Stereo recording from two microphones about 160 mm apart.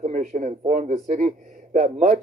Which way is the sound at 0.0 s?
45° right (ahead or behind).